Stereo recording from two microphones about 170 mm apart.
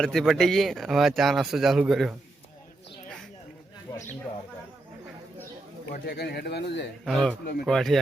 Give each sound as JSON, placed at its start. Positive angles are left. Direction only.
{"t": 0.0, "sound": "speech", "side_deg": 0}
{"t": 5.9, "sound": "speech", "side_deg": 65}
{"t": 7.0, "sound": "speech", "side_deg": 0}